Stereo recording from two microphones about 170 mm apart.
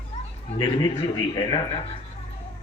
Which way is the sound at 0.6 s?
25° left (ahead or behind).